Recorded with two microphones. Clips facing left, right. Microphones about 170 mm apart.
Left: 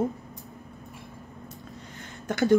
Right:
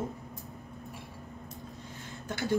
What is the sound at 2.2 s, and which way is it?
Speech, 70° left (ahead or behind).